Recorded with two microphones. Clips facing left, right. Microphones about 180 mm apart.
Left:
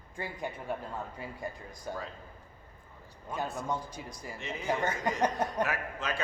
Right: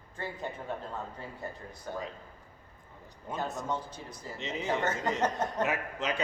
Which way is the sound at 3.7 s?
10° left (ahead or behind).